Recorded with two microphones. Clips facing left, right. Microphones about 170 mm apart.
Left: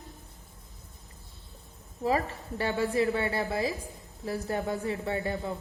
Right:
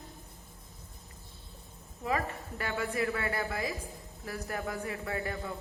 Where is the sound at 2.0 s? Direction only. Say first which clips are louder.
Left 5 dB; 30° left (ahead or behind).